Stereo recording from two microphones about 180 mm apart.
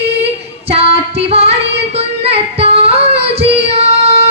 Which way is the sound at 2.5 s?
35° right (ahead or behind).